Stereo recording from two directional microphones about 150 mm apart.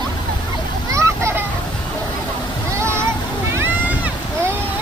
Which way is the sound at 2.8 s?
20° right (ahead or behind).